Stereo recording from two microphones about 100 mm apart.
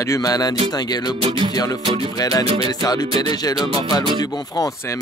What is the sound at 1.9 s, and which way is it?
Music, 60° right (ahead or behind).